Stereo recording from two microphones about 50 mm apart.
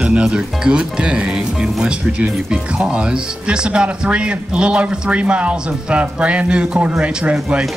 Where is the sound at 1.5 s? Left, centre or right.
Centre.